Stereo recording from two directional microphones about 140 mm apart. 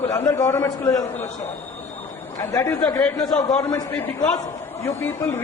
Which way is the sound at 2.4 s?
20° left (ahead or behind).